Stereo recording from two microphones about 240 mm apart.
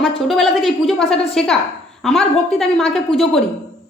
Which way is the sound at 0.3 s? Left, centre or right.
Centre.